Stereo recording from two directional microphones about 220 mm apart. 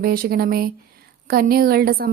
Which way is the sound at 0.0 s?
45° right (ahead or behind).